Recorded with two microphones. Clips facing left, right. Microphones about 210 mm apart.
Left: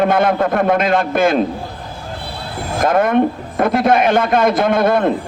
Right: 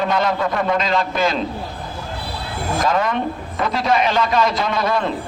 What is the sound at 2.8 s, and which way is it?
Speech, 55° left (ahead or behind).